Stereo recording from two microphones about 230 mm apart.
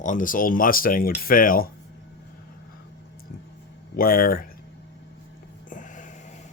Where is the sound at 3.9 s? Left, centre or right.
Left.